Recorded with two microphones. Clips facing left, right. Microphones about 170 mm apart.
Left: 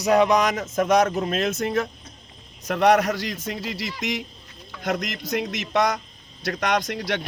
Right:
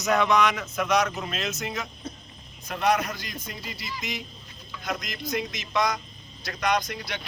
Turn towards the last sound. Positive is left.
turn(degrees=80)